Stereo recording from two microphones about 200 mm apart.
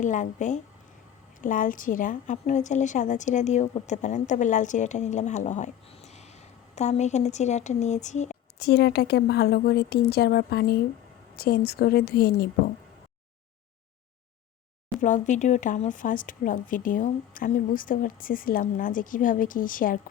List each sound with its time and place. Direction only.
0.0 s a woman's voice: 40° left (ahead or behind)
8.5 s speech: 55° left (ahead or behind)
15.0 s speech: 40° left (ahead or behind)